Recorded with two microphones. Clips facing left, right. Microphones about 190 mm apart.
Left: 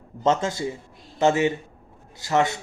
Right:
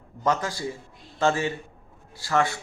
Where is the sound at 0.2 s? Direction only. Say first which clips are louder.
Left 4 dB; 25° left (ahead or behind).